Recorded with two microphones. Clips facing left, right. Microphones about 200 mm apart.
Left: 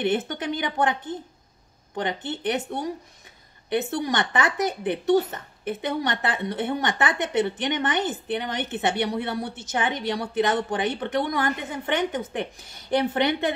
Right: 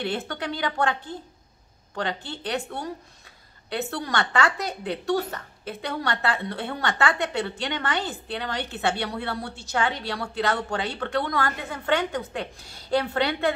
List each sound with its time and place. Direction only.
0.0 s speech: 20° left (ahead or behind)